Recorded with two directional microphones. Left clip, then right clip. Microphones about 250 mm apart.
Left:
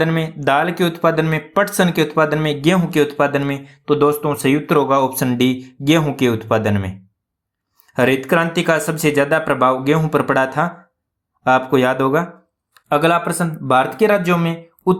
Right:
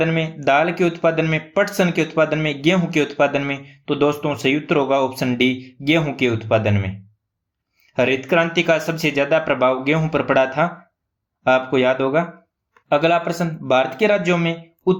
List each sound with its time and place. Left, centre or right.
0.0 s speech: centre